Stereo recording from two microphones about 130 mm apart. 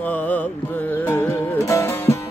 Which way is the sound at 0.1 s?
10° left (ahead or behind).